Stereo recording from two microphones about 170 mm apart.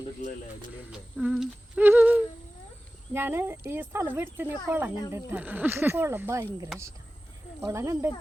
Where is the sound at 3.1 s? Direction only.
10° right (ahead or behind).